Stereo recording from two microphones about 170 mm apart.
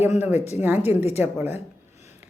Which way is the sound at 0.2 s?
10° right (ahead or behind).